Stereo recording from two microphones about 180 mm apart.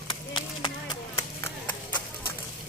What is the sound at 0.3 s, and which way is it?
Clip-clop, 25° left (ahead or behind).